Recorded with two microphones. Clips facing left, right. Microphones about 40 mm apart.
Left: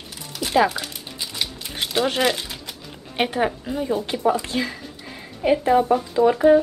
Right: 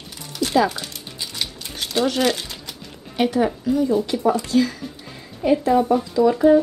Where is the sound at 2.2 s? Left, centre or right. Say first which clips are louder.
Right 1 dB; centre.